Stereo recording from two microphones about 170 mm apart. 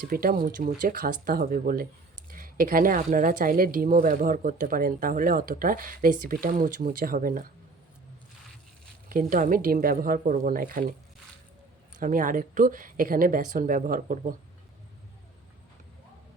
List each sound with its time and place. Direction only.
0.1 s speech: 60° right (ahead or behind)
9.0 s speech: 50° right (ahead or behind)
11.9 s speech: 50° right (ahead or behind)